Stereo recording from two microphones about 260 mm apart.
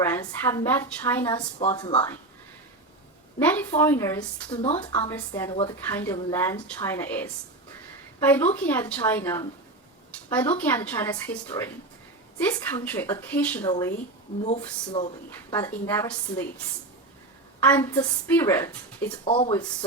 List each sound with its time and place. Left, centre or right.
0.0 s a woman's voice: centre
3.3 s a woman's voice: centre
4.5 s speech: left
5.0 s a woman's voice: centre
15.5 s a woman's voice: centre
17.7 s a woman's voice: centre
19.2 s speech: left